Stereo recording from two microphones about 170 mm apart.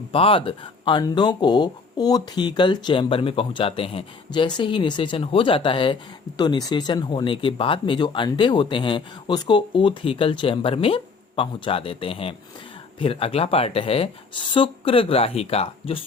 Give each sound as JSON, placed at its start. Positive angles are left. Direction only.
{"t": 0.1, "sound": "speech", "side_deg": 30}